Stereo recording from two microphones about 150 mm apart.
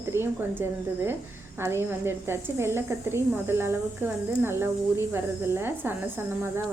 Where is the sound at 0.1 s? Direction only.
15° right (ahead or behind).